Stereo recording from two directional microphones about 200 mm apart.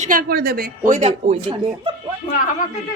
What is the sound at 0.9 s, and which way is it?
A woman's voice, 35° right (ahead or behind).